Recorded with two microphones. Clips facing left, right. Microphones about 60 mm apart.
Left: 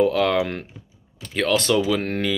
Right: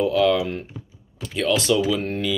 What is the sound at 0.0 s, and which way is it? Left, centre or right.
Speech, left.